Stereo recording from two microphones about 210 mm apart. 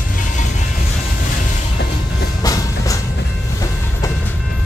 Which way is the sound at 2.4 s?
15° left (ahead or behind).